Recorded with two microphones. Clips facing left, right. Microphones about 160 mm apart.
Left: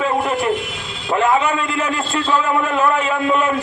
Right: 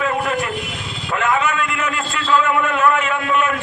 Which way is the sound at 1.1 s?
30° left (ahead or behind).